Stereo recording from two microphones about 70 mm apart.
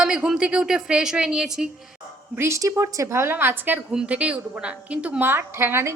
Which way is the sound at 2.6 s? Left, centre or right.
Right.